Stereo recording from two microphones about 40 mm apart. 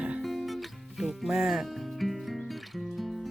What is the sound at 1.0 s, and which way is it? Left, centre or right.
Music, centre.